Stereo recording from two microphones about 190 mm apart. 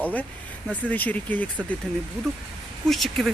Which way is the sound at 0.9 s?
10° left (ahead or behind).